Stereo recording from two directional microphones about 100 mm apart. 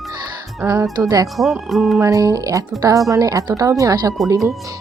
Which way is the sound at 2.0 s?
35° right (ahead or behind).